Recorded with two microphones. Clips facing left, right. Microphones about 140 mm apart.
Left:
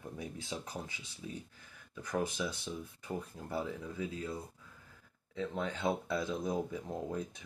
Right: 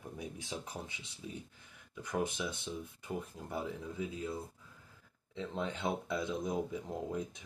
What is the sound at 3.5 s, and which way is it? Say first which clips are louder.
Speech: left 2 dB; 20° right (ahead or behind).